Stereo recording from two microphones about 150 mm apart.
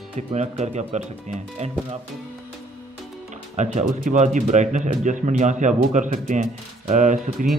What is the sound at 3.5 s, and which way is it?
Speech, 50° right (ahead or behind).